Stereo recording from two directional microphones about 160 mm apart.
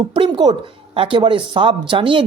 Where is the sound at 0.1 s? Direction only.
30° right (ahead or behind).